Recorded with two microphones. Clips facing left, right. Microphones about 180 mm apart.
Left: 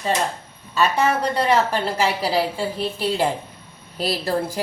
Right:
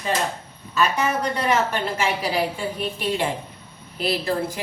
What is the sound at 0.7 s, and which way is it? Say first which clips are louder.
A woman's voice: left 2 dB; 30° left (ahead or behind).